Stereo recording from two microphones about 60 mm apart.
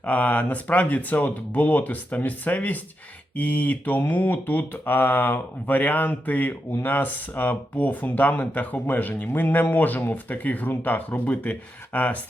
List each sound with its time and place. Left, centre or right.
0.0 s mantra: left